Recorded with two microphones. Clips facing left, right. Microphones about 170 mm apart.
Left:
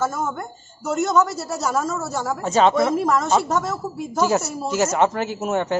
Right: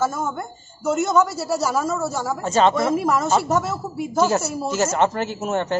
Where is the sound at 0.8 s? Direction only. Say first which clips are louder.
Right 1 dB; centre (ahead or behind).